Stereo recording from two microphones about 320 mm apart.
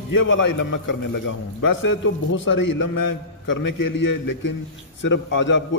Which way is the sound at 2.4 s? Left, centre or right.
Left.